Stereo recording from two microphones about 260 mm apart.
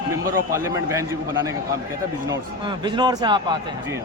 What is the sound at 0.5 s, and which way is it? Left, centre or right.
A man's voice, centre.